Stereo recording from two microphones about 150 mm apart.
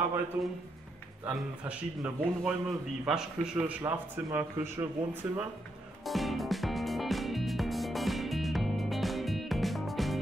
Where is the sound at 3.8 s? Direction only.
15° right (ahead or behind).